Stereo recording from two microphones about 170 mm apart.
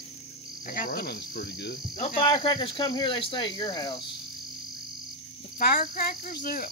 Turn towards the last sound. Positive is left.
turn(degrees=55)  # may be behind; listen again after turning